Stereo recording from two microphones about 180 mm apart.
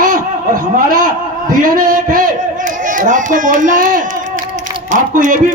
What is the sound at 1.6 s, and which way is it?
Speech, 50° right (ahead or behind).